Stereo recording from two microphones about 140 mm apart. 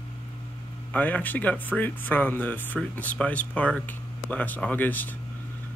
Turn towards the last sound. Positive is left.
turn(degrees=10)  # may be behind; listen again after turning